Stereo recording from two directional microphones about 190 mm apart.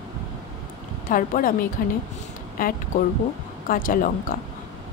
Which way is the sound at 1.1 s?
45° left (ahead or behind).